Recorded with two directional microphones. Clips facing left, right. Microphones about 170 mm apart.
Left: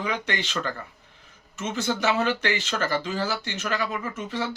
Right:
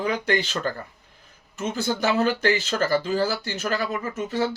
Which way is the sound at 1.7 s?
40° right (ahead or behind).